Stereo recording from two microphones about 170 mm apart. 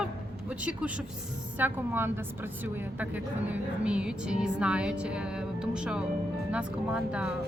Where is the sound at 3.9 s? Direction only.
5° right (ahead or behind).